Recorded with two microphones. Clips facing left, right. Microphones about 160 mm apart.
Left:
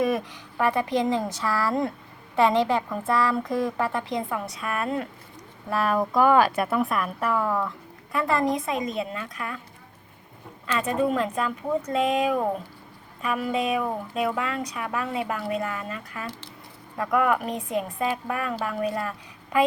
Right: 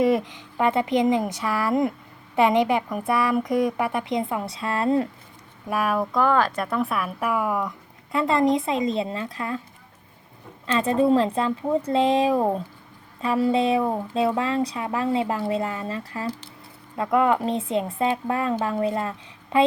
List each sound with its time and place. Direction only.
0.0 s a woman's voice: 20° right (ahead or behind)
5.6 s a woman's voice: 10° right (ahead or behind)
10.7 s a woman's voice: 30° right (ahead or behind)